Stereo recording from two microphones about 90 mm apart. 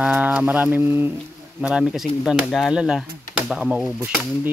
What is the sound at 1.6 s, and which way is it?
Speech, 10° right (ahead or behind).